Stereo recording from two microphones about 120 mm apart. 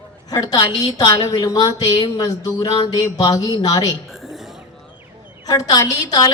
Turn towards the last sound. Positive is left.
turn(degrees=30)  # may be behind; listen again after turning